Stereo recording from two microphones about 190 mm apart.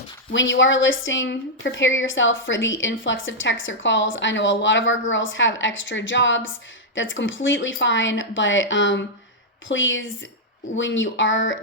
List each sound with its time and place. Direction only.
0.3 s a woman's voice: 75° left (ahead or behind)